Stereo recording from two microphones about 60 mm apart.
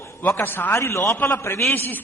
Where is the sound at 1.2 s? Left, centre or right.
Left.